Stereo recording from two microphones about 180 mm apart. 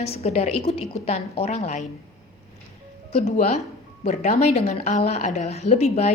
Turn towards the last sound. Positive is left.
turn(degrees=35)  # may be behind; listen again after turning